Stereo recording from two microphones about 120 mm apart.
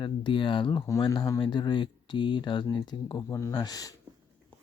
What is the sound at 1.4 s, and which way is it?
Speech, 40° left (ahead or behind).